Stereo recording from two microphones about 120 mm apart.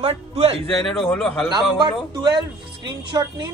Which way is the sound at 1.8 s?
35° right (ahead or behind).